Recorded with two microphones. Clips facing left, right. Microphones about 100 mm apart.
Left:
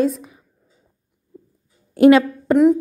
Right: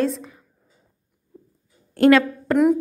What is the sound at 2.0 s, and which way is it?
Speech, 20° left (ahead or behind).